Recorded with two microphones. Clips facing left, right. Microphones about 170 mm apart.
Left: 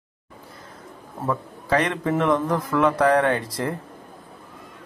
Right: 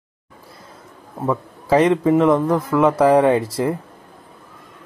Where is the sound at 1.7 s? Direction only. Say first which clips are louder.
Right 8 dB; 10° right (ahead or behind); by 3.7 s 25° right (ahead or behind).